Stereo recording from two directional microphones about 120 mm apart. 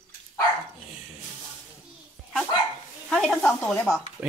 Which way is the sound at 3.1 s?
5° left (ahead or behind).